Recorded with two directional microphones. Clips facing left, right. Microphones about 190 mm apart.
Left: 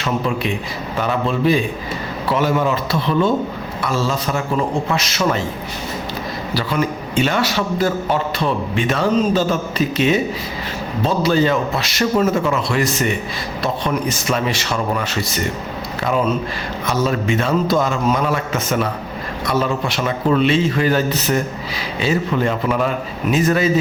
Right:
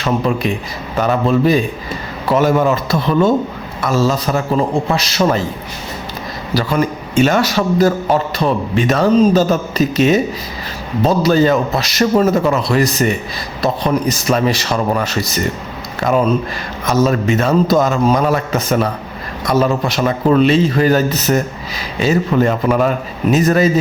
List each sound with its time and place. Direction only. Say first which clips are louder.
0.9 s a man's voice: right 6 dB; 40° right (ahead or behind)
6.5 s a man's voice: right 4 dB; 45° right (ahead or behind)
16.8 s a man's voice: right 5 dB; 45° right (ahead or behind)